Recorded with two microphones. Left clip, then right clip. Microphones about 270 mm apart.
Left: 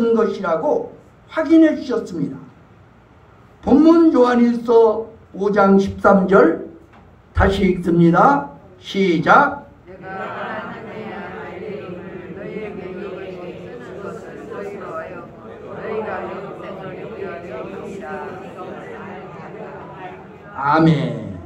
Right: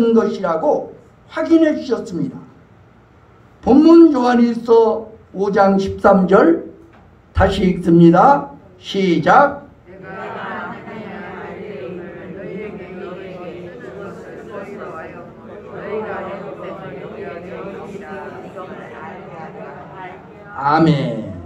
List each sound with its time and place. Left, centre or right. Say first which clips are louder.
0.0 s a man's voice: right 2 dB; right
3.6 s a man's voice: right 3 dB; right
20.6 s a sound: right 1 dB; right